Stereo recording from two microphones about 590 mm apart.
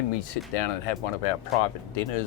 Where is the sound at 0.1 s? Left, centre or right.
Left.